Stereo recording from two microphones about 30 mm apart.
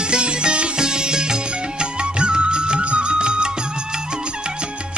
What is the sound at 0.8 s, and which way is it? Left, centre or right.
Music, right.